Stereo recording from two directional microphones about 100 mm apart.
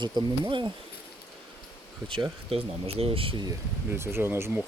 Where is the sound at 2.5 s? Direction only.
85° right; by 3.4 s 65° right (ahead or behind).